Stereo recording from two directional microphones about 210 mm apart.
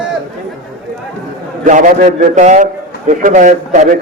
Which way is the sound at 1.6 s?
40° right (ahead or behind).